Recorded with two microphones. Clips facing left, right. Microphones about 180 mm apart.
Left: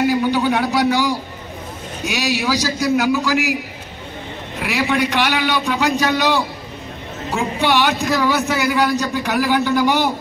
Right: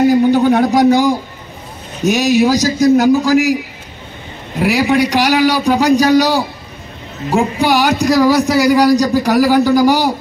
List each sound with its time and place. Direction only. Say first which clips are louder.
0.1 s a sound: right 7 dB; 45° right (ahead or behind)
2.0 s a man's voice: right 9 dB; 45° right (ahead or behind)
4.6 s speech: right 6 dB; 40° right (ahead or behind)